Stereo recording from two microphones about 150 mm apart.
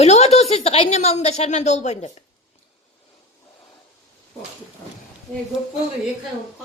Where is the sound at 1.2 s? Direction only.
50° left (ahead or behind).